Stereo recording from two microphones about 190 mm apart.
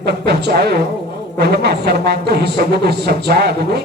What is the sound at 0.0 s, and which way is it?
Speech, 60° right (ahead or behind).